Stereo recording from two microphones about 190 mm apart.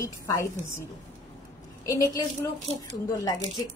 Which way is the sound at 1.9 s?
20° left (ahead or behind).